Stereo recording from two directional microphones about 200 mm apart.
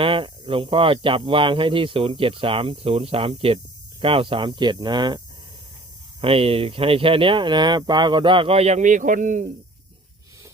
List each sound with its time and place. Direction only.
0.0 s speech: 25° right (ahead or behind)
6.2 s speech: 30° right (ahead or behind)